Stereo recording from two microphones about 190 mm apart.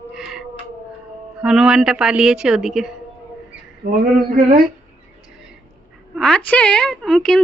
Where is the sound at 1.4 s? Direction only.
5° right (ahead or behind).